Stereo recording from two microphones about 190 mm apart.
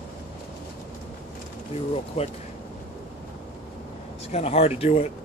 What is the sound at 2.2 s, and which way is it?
Speech, 35° left (ahead or behind).